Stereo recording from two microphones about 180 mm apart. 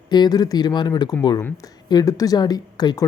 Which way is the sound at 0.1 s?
25° left (ahead or behind).